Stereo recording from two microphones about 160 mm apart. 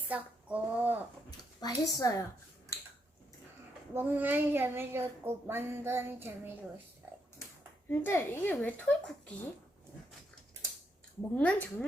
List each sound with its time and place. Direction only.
0.1 s speech: 10° right (ahead or behind)
1.3 s a woman's voice: 25° left (ahead or behind)
3.9 s a child's voice: 10° right (ahead or behind)
7.9 s a woman's voice: 15° left (ahead or behind)
11.2 s a woman's voice: 5° left (ahead or behind)